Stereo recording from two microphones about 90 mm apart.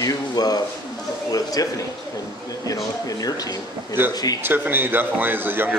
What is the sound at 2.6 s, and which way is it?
Speech, 40° left (ahead or behind).